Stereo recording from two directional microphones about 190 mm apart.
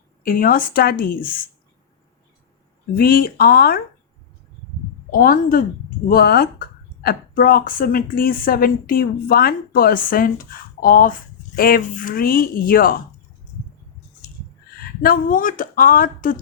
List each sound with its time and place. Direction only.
0.2 s a woman's voice: 50° left (ahead or behind)
2.9 s a woman's voice: 50° left (ahead or behind)
5.1 s a woman's voice: 45° left (ahead or behind)
15.0 s a woman's voice: 50° left (ahead or behind)